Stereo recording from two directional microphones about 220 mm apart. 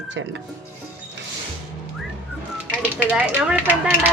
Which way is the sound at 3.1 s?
5° right (ahead or behind).